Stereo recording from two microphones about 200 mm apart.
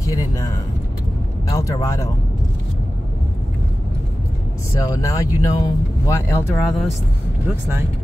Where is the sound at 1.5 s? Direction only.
15° left (ahead or behind).